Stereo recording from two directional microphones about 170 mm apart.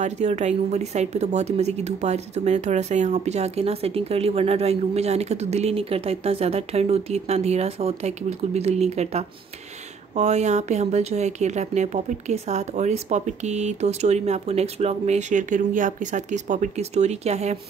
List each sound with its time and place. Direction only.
0.0 s a woman's voice: 40° right (ahead or behind)